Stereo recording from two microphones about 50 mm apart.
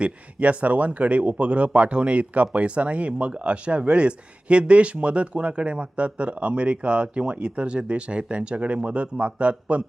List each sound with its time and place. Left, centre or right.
0.0 s speech: right